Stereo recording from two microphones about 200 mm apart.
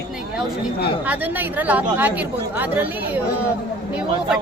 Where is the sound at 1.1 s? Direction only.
10° right (ahead or behind).